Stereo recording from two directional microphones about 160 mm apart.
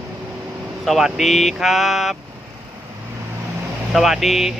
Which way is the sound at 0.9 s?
Centre (ahead or behind).